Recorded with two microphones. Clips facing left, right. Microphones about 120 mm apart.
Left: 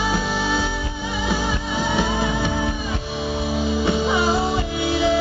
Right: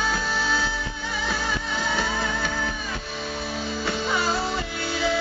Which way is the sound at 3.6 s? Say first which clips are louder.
Left 8 dB; 5° left (ahead or behind).